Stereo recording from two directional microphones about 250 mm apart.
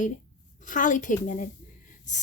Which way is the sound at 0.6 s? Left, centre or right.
Left.